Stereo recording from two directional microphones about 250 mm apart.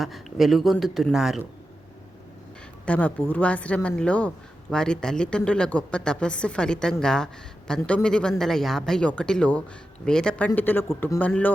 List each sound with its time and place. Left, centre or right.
0.0 s speech: centre
2.8 s speech: centre